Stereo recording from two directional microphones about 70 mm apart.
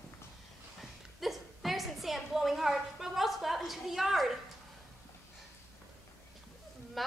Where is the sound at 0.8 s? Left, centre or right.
Centre.